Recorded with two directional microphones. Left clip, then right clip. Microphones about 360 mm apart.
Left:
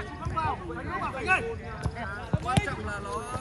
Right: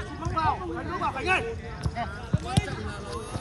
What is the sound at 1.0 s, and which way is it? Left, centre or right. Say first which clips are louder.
Speech: right 1 dB; right.